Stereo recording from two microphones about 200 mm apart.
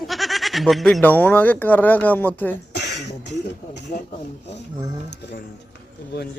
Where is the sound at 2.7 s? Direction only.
55° left (ahead or behind).